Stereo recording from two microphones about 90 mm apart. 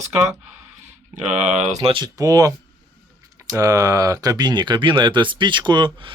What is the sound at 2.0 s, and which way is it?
Speech, 40° right (ahead or behind).